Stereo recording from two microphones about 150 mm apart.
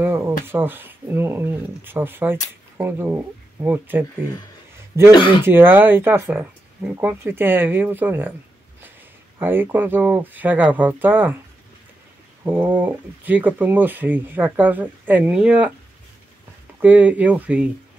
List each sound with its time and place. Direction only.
0.0 s speech: 15° right (ahead or behind)
5.1 s speech: 35° left (ahead or behind)
5.4 s speech: 15° right (ahead or behind)
9.4 s speech: 15° right (ahead or behind)
12.4 s speech: 10° right (ahead or behind)
16.8 s speech: 10° right (ahead or behind)